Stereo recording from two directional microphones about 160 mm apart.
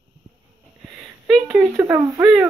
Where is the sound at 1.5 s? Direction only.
15° right (ahead or behind).